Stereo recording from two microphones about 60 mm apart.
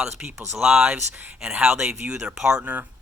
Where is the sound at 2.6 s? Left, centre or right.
Right.